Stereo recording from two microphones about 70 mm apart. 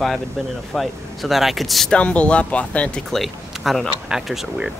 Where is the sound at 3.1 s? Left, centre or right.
Centre.